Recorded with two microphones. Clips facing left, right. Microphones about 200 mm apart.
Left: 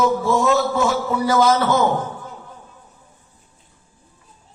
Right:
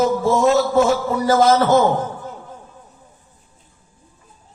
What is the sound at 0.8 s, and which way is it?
Speech, 45° right (ahead or behind).